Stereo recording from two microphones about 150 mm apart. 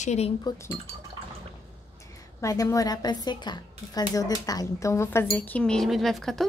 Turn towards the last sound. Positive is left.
turn(degrees=0)  # may be behind; listen again after turning